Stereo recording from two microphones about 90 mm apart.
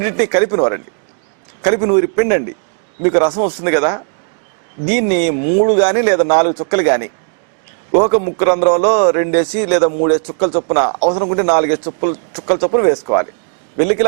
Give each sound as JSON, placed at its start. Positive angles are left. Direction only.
{"t": 0.0, "sound": "speech", "side_deg": -15}